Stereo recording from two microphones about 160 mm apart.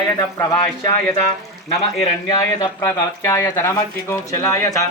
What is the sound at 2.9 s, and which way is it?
Speech, 15° left (ahead or behind).